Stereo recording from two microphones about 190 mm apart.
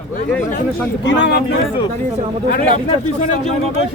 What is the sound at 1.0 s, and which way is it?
Speech, 65° left (ahead or behind).